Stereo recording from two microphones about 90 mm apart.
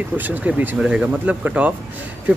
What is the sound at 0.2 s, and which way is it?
Speech, 20° right (ahead or behind).